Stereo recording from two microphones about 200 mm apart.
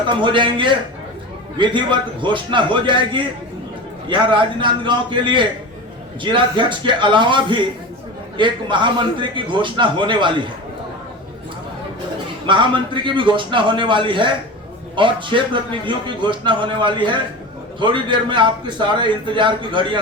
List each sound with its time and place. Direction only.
0.2 s a man's voice: 25° right (ahead or behind)
12.5 s a man's voice: 25° right (ahead or behind)